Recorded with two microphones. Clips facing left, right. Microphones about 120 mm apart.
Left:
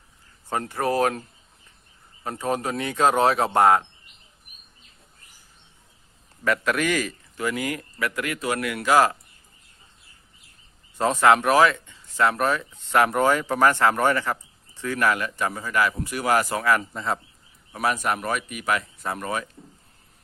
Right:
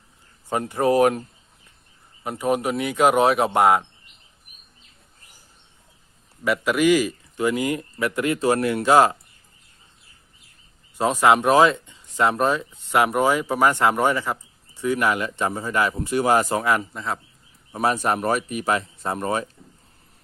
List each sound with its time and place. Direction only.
0.5 s speech: 15° right (ahead or behind)
2.2 s speech: 10° right (ahead or behind)
6.4 s speech: 10° right (ahead or behind)
10.9 s speech: 15° right (ahead or behind)
16.9 s speech: centre (ahead or behind)
17.7 s speech: 30° right (ahead or behind)